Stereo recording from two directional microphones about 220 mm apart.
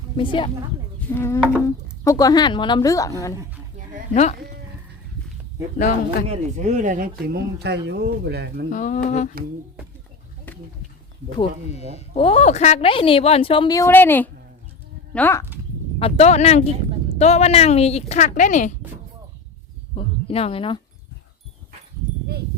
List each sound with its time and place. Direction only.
0.2 s a woman's voice: 25° left (ahead or behind)
1.1 s speech: 10° left (ahead or behind)
4.1 s speech: 30° left (ahead or behind)
6.2 s speech: 30° right (ahead or behind); by 8.6 s 50° right (ahead or behind)
8.7 s speech: 35° left (ahead or behind)
12.1 s a woman's voice: 25° left (ahead or behind); by 15.4 s 10° left (ahead or behind)
16.0 s a woman's voice: 25° left (ahead or behind)
20.0 s speech: 25° left (ahead or behind)